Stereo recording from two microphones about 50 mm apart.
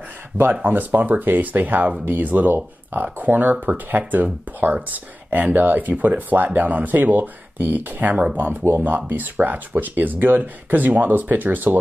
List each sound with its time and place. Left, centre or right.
0.5 s speech: right